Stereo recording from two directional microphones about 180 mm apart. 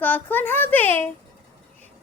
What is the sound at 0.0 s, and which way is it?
Child singing, 10° left (ahead or behind).